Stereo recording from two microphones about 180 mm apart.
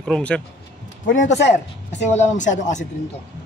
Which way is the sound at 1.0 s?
45° left (ahead or behind).